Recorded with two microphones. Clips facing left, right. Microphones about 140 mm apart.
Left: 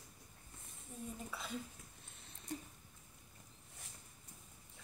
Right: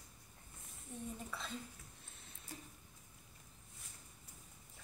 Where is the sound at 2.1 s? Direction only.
Centre (ahead or behind).